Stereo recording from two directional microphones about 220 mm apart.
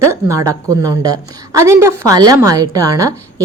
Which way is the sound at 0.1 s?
15° right (ahead or behind).